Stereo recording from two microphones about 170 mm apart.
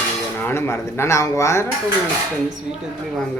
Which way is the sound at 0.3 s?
15° left (ahead or behind).